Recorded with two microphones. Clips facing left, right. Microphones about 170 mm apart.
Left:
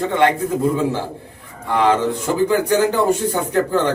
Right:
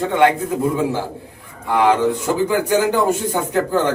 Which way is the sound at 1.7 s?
15° right (ahead or behind).